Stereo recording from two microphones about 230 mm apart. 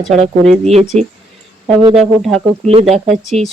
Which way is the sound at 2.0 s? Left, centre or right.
Centre.